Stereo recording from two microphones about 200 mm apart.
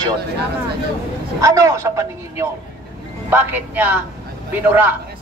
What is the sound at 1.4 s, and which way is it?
Speech, 15° right (ahead or behind).